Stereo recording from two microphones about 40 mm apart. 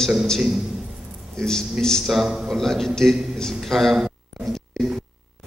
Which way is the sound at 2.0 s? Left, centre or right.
Centre.